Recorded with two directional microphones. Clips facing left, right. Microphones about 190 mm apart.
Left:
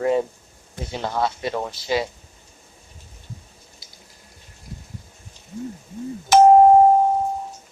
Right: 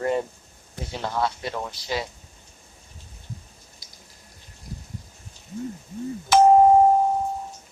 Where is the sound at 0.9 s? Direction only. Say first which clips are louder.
Left 2 dB; 20° left (ahead or behind).